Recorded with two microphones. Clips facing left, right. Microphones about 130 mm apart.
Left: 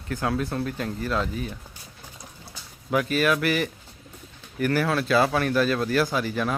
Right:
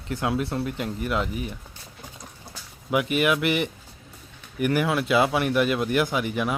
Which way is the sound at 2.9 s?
15° right (ahead or behind).